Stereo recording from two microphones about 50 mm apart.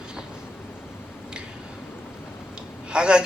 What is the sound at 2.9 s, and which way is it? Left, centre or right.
Speech, centre.